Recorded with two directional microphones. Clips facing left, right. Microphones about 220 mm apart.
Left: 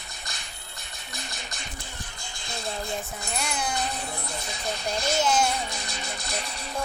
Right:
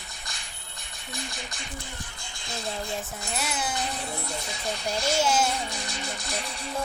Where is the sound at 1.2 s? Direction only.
40° left (ahead or behind).